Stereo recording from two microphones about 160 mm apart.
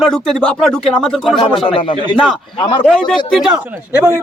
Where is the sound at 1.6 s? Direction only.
35° left (ahead or behind).